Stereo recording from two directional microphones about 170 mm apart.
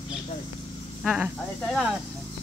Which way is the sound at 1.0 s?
5° right (ahead or behind).